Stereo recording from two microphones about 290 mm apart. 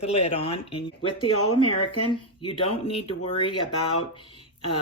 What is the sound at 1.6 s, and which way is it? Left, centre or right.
Speech, left.